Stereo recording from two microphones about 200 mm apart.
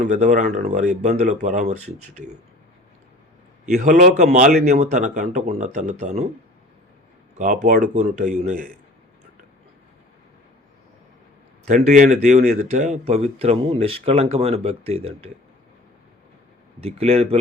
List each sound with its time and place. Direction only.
0.0 s speech: 35° right (ahead or behind)
3.7 s speech: 40° right (ahead or behind)
7.3 s speech: 40° right (ahead or behind)
11.7 s speech: 40° right (ahead or behind)
16.8 s speech: 30° right (ahead or behind)